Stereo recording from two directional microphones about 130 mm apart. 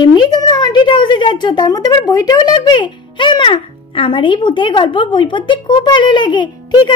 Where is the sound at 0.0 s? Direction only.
35° left (ahead or behind).